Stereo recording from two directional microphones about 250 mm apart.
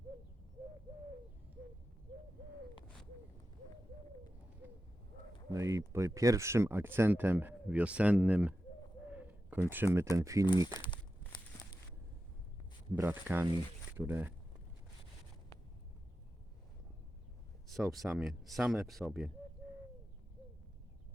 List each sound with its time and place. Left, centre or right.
5.5 s speech: centre
9.1 s a sound: centre
10.2 s speech: centre
10.7 s speech: centre
11.3 s a sound: centre
13.0 s speech: centre
17.7 s speech: centre